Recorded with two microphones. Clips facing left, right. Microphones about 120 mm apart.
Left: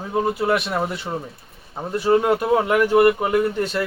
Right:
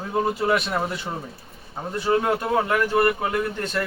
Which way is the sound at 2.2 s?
15° left (ahead or behind).